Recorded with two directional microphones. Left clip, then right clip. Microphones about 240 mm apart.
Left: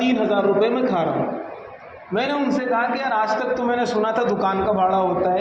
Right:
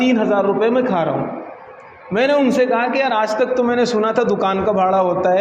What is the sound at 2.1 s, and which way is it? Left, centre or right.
Speech, right.